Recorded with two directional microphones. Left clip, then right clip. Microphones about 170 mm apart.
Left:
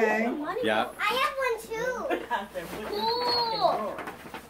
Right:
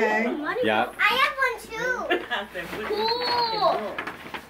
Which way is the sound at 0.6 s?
25° right (ahead or behind).